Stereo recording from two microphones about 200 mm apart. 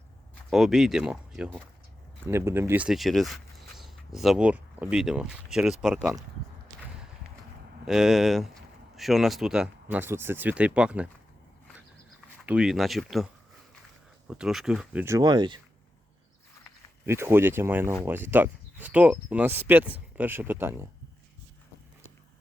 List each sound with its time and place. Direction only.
0.5 s speech: centre (ahead or behind)
7.9 s speech: centre (ahead or behind)
12.4 s speech: 5° right (ahead or behind)
14.3 s speech: 5° right (ahead or behind); by 15.5 s 20° right (ahead or behind)
17.1 s speech: 10° right (ahead or behind)